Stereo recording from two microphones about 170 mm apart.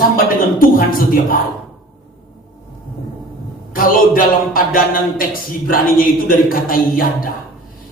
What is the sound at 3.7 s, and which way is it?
A woman's voice, 55° left (ahead or behind).